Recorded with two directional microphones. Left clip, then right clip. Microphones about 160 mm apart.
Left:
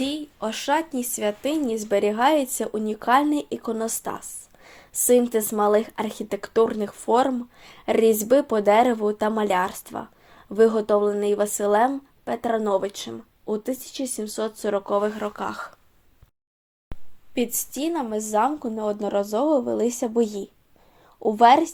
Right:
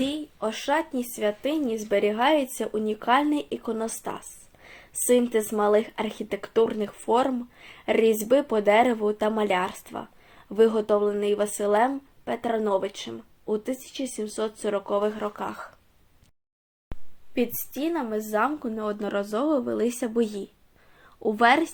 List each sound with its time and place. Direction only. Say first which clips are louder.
0.0 s speech: left 1 dB; 40° left (ahead or behind)
16.9 s a sound: even; centre (ahead or behind)
17.3 s a woman's voice: left 1 dB; 30° left (ahead or behind); by 21.7 s 10° left (ahead or behind)